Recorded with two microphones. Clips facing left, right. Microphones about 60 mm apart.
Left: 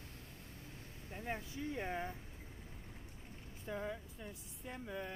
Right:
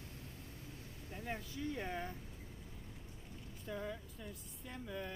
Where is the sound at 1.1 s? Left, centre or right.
Left.